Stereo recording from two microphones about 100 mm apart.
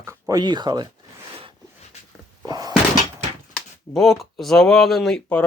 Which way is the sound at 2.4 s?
40° right (ahead or behind).